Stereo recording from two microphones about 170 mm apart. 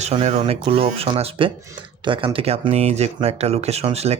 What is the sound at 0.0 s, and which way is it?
Speech, 40° right (ahead or behind).